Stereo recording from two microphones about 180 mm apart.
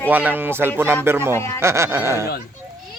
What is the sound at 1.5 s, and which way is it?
Speech, 15° right (ahead or behind).